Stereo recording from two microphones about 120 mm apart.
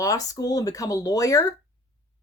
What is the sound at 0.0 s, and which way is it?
Speech, 30° left (ahead or behind).